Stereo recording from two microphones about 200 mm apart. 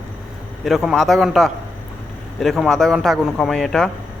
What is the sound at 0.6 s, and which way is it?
A man's voice, centre (ahead or behind).